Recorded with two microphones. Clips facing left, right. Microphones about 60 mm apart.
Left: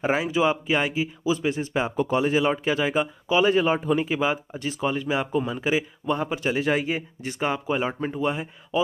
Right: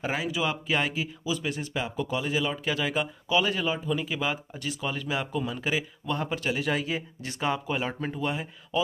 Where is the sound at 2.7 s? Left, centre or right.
Left.